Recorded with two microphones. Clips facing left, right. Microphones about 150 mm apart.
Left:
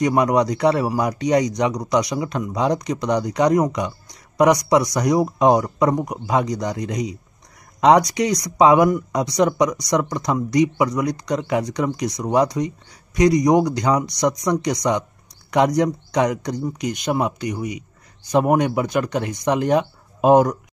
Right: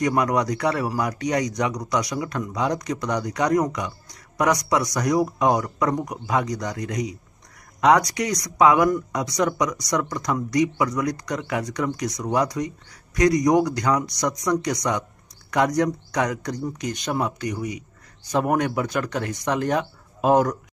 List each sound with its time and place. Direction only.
0.0 s speech: 20° left (ahead or behind)